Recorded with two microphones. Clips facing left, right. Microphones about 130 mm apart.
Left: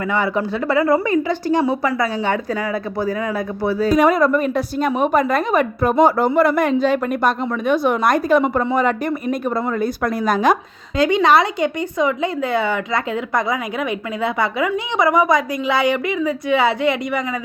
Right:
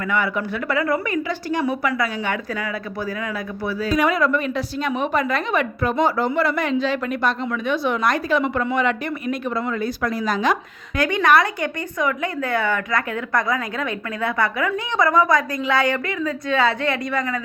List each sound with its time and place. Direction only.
0.1 s speech: 30° left (ahead or behind)
1.3 s speech: 20° left (ahead or behind)
1.6 s speech: 30° left (ahead or behind)
3.8 s a woman's voice: 45° left (ahead or behind)
10.9 s speech: 20° left (ahead or behind)